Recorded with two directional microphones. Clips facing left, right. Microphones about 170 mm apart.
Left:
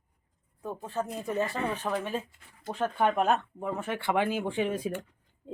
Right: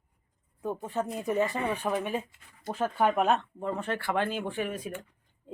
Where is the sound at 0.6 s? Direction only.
20° right (ahead or behind); by 4.7 s 15° left (ahead or behind).